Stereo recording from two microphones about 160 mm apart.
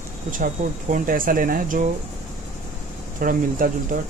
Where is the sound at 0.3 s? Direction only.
55° right (ahead or behind).